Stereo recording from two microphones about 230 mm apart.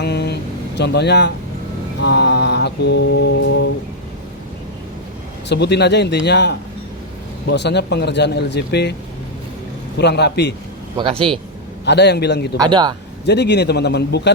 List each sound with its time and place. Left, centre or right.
0.0 s vehicle: left
0.8 s mantra: left
5.5 s mantra: left
10.0 s mantra: left
10.9 s a man's voice: right
11.9 s mantra: left
12.5 s speech: centre
13.2 s mantra: left